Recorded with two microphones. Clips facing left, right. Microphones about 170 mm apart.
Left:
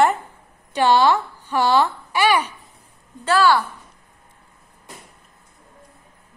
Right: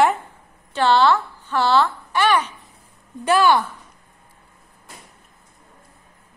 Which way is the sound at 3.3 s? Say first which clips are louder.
Right 1 dB; 20° right (ahead or behind).